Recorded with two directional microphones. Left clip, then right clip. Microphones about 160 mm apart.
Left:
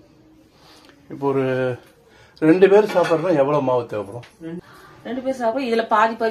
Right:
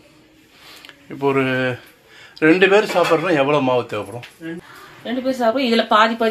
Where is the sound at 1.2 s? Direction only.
5° left (ahead or behind).